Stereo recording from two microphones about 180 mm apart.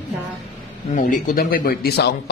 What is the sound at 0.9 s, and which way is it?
A man's voice, 50° left (ahead or behind).